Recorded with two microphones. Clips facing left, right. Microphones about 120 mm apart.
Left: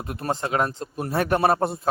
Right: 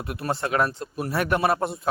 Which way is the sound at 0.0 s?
35° left (ahead or behind).